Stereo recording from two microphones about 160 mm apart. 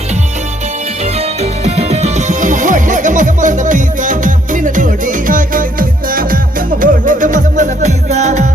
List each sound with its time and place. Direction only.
1.4 s music: 40° right (ahead or behind)